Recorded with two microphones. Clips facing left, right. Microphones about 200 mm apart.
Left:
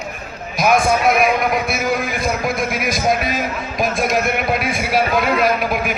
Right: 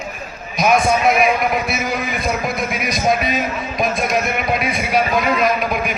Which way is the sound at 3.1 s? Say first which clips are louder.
Right 2 dB; centre (ahead or behind).